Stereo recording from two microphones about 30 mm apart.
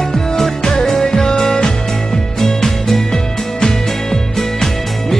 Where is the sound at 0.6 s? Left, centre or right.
Left.